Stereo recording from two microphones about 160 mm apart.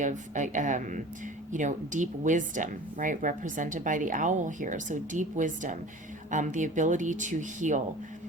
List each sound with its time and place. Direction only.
0.0 s a woman's voice: 50° right (ahead or behind)